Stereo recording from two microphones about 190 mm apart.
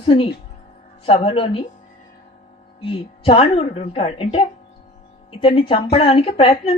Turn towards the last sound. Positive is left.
turn(degrees=30)  # may be behind; listen again after turning